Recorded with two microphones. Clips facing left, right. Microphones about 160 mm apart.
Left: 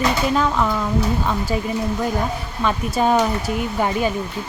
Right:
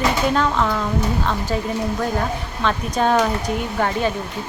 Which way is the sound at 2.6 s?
5° left (ahead or behind).